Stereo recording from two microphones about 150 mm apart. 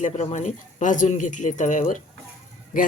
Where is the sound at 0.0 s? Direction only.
50° left (ahead or behind).